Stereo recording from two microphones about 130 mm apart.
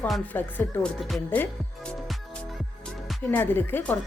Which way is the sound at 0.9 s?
Centre (ahead or behind).